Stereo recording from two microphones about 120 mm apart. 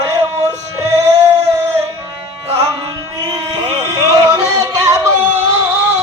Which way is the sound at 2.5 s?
25° right (ahead or behind).